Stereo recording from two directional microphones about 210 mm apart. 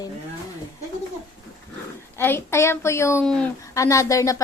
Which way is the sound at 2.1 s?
10° left (ahead or behind).